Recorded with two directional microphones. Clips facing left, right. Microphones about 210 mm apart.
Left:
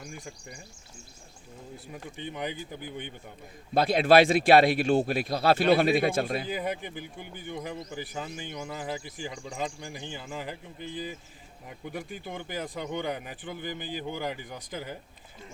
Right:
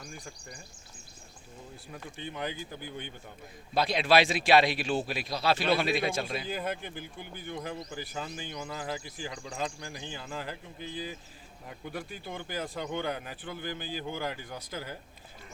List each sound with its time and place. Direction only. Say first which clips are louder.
0.0 s a man's voice: left 3 dB; 10° left (ahead or behind)
2.1 s a man's voice: left 2 dB; 15° left (ahead or behind)
3.8 s speech: left 5 dB; 55° left (ahead or behind)
6.5 s a man's voice: left 2 dB; 15° left (ahead or behind)
11.9 s a man's voice: left 2 dB; 15° left (ahead or behind)